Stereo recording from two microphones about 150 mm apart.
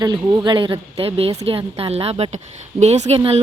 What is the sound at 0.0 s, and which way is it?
A woman's voice, 30° right (ahead or behind).